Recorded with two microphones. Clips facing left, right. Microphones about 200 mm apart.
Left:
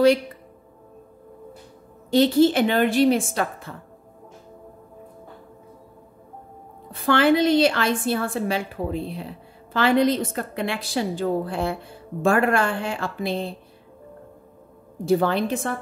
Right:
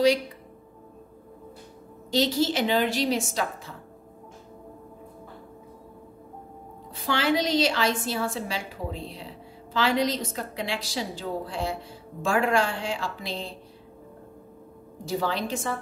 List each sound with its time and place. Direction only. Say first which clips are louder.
2.0 s a woman's voice: left 7 dB; 55° left (ahead or behind)
6.9 s a woman's voice: left 7 dB; 55° left (ahead or behind)
15.0 s a woman's voice: left 8 dB; 55° left (ahead or behind)